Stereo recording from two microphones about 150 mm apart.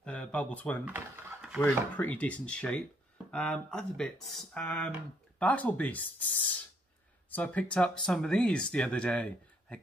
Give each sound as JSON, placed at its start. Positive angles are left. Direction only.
{"t": 0.0, "sound": "speech", "side_deg": 5}
{"t": 0.8, "sound": "speech", "side_deg": -15}
{"t": 2.0, "sound": "speech", "side_deg": 10}